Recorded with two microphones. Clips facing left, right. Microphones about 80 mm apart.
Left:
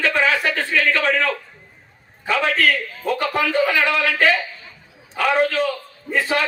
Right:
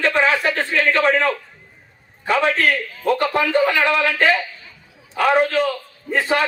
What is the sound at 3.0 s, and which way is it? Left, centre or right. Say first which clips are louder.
Speech: right 4 dB; centre.